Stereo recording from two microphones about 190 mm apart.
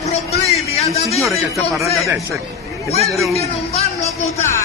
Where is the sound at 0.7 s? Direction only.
35° left (ahead or behind).